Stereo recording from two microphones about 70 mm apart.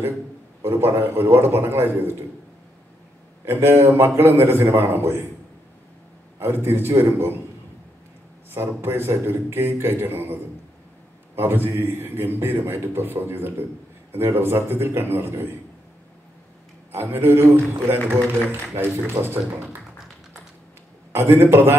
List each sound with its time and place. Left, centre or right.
0.6 s a man's voice: right
3.4 s a man's voice: right
6.4 s a man's voice: right
8.5 s a man's voice: right
16.9 s a man's voice: right
21.1 s a man's voice: right